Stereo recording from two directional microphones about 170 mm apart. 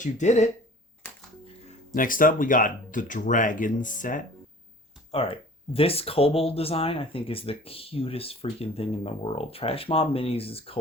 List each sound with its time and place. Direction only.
0.0 s speech: 45° left (ahead or behind)
1.0 s music: 15° left (ahead or behind)
2.0 s speech: 55° left (ahead or behind)
5.1 s speech: 35° left (ahead or behind)